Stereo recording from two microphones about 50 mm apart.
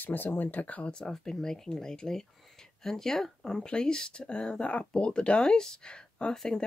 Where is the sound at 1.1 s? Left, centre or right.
Centre.